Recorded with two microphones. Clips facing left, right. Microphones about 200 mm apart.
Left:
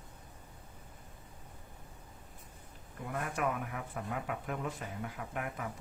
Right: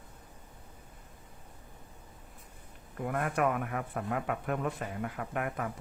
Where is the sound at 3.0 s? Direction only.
60° right (ahead or behind).